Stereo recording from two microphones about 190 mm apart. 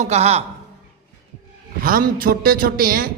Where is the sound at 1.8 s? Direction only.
50° right (ahead or behind).